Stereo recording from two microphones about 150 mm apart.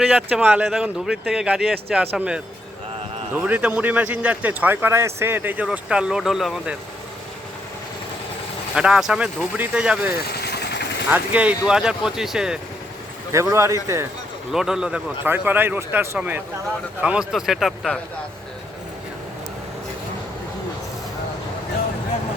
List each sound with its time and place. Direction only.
0.2 s speech: 10° right (ahead or behind)
8.7 s speech: 5° right (ahead or behind)
13.3 s speech: 20° right (ahead or behind)
14.5 s speech: 5° right (ahead or behind)